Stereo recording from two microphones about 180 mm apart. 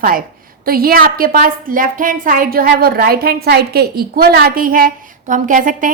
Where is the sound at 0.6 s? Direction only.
55° right (ahead or behind).